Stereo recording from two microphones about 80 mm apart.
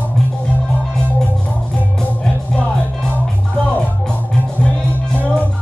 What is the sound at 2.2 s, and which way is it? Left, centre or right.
Music, centre.